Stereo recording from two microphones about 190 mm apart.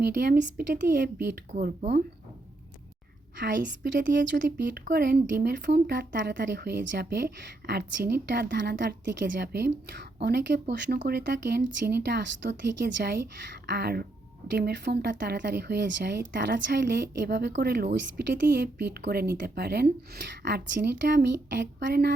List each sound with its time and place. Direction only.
0.0 s speech: 60° right (ahead or behind)
1.5 s a woman's voice: 40° right (ahead or behind)
3.3 s a woman's voice: 45° right (ahead or behind); by 22.1 s 60° right (ahead or behind)